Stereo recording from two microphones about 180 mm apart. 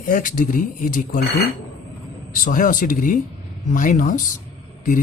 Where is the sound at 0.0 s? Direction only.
50° left (ahead or behind).